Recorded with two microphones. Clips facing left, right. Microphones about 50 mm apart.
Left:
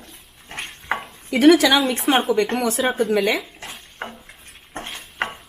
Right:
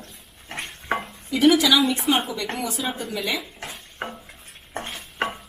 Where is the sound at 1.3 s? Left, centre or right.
Left.